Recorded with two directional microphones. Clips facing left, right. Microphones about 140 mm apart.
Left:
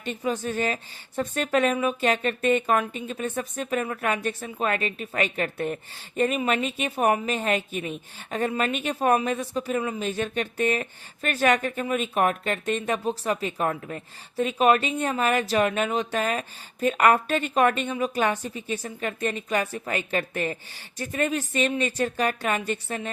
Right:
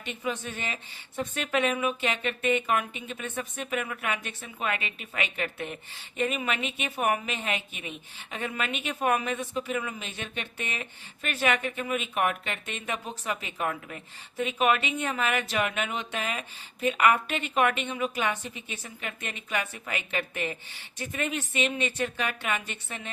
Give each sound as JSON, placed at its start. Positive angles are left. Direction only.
{"t": 0.0, "sound": "a woman's voice", "side_deg": 40}